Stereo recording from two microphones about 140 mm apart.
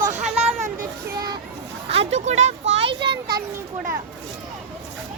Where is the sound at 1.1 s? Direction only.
30° right (ahead or behind).